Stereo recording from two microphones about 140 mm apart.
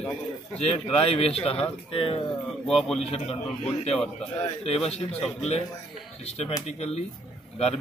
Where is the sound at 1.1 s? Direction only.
45° left (ahead or behind).